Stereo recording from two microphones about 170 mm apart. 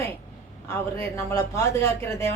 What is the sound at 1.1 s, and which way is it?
Speech, 15° left (ahead or behind).